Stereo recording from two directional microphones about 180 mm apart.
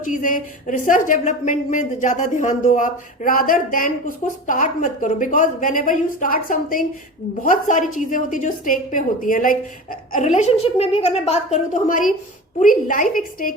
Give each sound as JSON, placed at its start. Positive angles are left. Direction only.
{"t": 0.0, "sound": "speech", "side_deg": 45}